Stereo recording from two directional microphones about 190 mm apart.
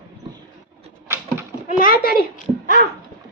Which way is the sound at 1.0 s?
15° right (ahead or behind).